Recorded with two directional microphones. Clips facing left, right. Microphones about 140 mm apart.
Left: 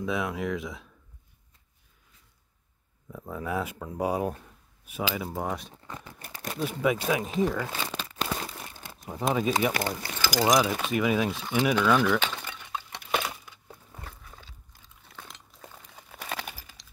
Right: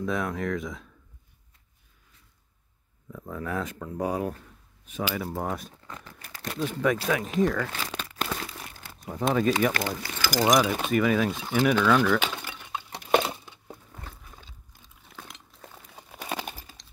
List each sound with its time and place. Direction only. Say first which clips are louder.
0.0 s speech: right 1 dB; 5° left (ahead or behind)
3.1 s speech: even; 10° left (ahead or behind)
5.3 s speech: right 1 dB; centre (ahead or behind)
7.7 s crumpling: left 1 dB; 5° left (ahead or behind)
8.6 s crumpling: right 1 dB; 20° left (ahead or behind)
9.1 s speech: right 2 dB; 5° left (ahead or behind)
10.5 s speech: right 3 dB; centre (ahead or behind)
11.5 s speech: right 2 dB; 10° left (ahead or behind)
12.2 s a sound: right 1 dB; 10° right (ahead or behind)
12.9 s crumpling: right 8 dB; 40° right (ahead or behind)
13.2 s crumpling: right 4 dB; 25° right (ahead or behind)
15.1 s chink: right 1 dB; 5° right (ahead or behind)
16.1 s a sound: right 3 dB; 15° right (ahead or behind)
16.4 s a sound: right 3 dB; 30° right (ahead or behind)